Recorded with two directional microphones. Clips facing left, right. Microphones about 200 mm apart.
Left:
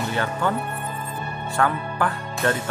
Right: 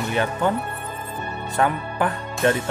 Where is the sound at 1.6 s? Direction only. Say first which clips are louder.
Right 1 dB; 20° right (ahead or behind).